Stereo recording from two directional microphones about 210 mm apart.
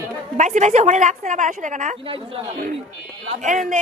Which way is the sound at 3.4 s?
35° right (ahead or behind).